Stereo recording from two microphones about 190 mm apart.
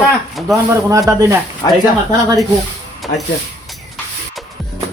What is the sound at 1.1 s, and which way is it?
Speech, 15° right (ahead or behind).